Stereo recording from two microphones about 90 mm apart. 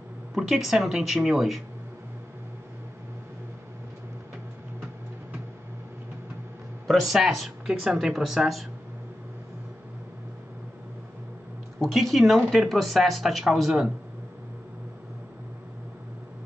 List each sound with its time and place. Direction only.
0.3 s speech: centre (ahead or behind)
6.9 s speech: centre (ahead or behind)
11.8 s speech: centre (ahead or behind)